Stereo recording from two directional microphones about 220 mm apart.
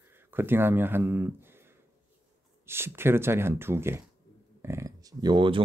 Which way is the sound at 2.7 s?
10° right (ahead or behind).